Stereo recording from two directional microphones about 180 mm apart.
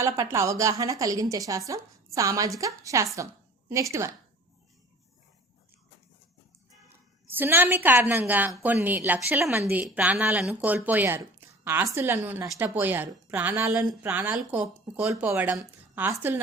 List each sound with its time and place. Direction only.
0.0 s a woman's voice: 15° right (ahead or behind)
7.3 s a woman's voice: 10° right (ahead or behind)